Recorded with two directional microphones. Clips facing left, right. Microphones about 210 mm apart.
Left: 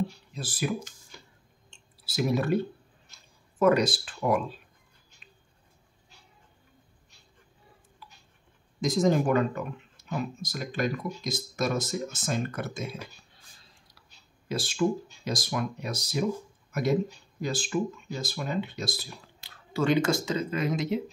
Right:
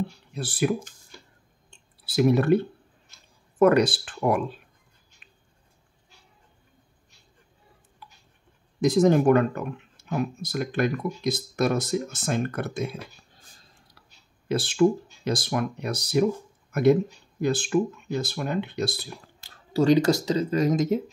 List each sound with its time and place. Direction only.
0.3 s speech: 65° right (ahead or behind)
2.1 s speech: 60° right (ahead or behind)
8.8 s speech: 60° right (ahead or behind)
13.3 s a sound: 45° right (ahead or behind)
14.5 s speech: 60° right (ahead or behind)
17.4 s speech: 60° right (ahead or behind)